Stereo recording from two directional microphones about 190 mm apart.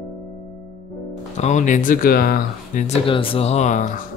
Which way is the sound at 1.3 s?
40° left (ahead or behind).